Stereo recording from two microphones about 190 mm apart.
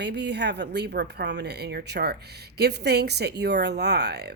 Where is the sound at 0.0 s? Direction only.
65° right (ahead or behind).